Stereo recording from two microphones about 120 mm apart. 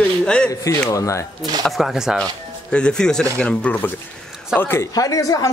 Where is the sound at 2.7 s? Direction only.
5° left (ahead or behind).